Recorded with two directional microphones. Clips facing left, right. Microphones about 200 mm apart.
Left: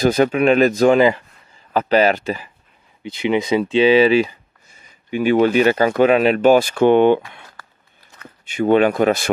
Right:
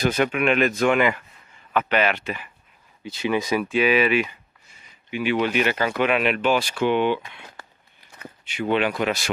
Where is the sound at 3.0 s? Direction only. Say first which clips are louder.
Left 5 dB; 20° left (ahead or behind).